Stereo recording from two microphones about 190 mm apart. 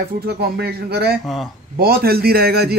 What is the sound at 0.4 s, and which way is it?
Speech, 55° right (ahead or behind).